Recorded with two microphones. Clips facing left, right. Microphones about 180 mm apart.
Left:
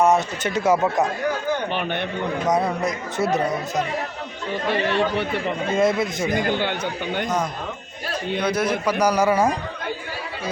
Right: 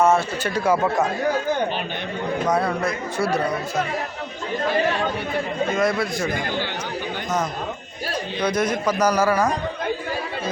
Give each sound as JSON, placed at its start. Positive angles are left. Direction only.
{"t": 0.0, "sound": "speech", "side_deg": 20}
{"t": 2.5, "sound": "speech", "side_deg": 20}
{"t": 5.7, "sound": "speech", "side_deg": 25}
{"t": 8.4, "sound": "a man's voice", "side_deg": 10}